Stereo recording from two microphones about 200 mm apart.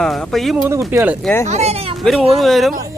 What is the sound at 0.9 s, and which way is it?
Speech, 10° right (ahead or behind).